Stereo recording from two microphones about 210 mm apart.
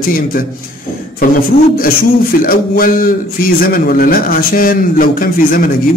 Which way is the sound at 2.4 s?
40° left (ahead or behind).